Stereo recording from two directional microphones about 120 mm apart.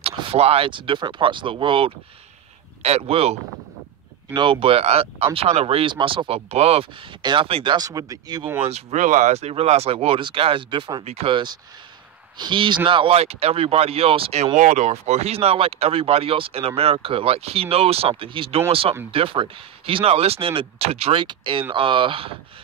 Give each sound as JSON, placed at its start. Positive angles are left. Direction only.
{"t": 0.0, "sound": "speech", "side_deg": -55}
{"t": 2.8, "sound": "speech", "side_deg": -60}
{"t": 8.6, "sound": "speech", "side_deg": -70}
{"t": 11.1, "sound": "speech", "side_deg": -55}